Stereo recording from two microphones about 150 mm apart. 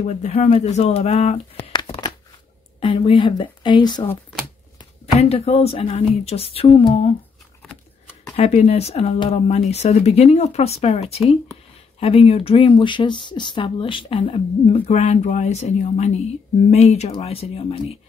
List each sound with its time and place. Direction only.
0.0 s speech: 50° left (ahead or behind); by 4.1 s 30° left (ahead or behind)
5.0 s speech: 45° left (ahead or behind)
8.4 s speech: 45° left (ahead or behind)
14.9 s speech: 50° left (ahead or behind)